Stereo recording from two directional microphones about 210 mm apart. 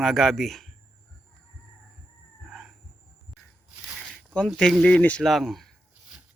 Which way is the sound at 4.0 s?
5° left (ahead or behind).